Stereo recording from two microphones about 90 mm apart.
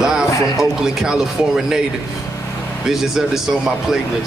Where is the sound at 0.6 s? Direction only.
5° right (ahead or behind).